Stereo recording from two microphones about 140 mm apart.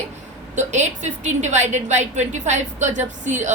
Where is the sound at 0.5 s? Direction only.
55° right (ahead or behind).